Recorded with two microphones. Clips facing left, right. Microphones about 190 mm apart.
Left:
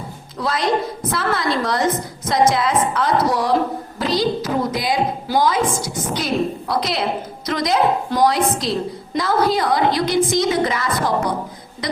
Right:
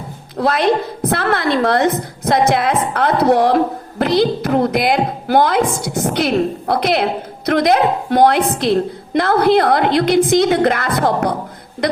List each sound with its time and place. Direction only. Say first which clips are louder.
0.3 s a woman's voice: right 5 dB; 65° right (ahead or behind)